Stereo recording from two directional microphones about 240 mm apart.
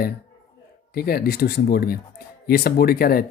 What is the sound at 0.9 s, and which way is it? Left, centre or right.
Speech, left.